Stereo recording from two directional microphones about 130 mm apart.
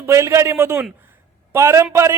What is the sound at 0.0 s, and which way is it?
Speech, 20° right (ahead or behind).